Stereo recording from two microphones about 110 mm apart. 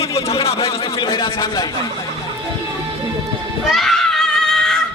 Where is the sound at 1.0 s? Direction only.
40° left (ahead or behind).